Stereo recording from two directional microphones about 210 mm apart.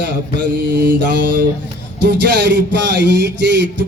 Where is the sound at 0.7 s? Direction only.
10° right (ahead or behind).